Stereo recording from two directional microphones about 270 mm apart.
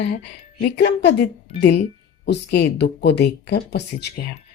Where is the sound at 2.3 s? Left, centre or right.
Left.